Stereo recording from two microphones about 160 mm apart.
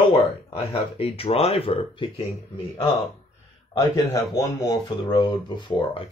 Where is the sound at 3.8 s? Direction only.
20° left (ahead or behind).